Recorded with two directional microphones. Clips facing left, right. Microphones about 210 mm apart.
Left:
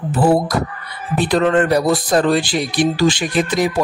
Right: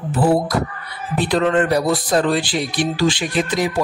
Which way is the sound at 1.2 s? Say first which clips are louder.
Left 2 dB; 45° left (ahead or behind).